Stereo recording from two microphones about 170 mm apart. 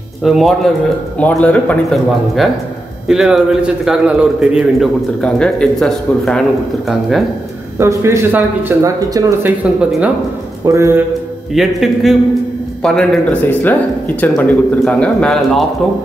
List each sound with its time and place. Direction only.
0.2 s a man's voice: centre (ahead or behind)
7.8 s speech: 15° right (ahead or behind)
10.6 s speech: 15° right (ahead or behind)
11.5 s a man's voice: centre (ahead or behind)